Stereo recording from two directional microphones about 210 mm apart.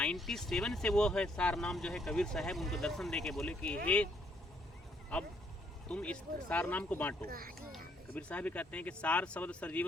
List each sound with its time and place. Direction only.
0.0 s speech: centre (ahead or behind)
5.9 s speech: 5° left (ahead or behind)
7.3 s speech: 45° right (ahead or behind)
7.7 s speech: 5° left (ahead or behind)